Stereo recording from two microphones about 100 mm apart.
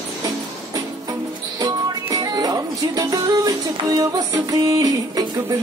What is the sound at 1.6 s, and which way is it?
Music, 40° right (ahead or behind).